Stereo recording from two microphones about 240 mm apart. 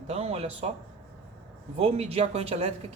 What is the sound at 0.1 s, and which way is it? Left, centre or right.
Speech, right.